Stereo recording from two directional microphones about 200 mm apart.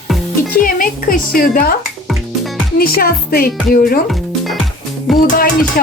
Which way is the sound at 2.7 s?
50° left (ahead or behind).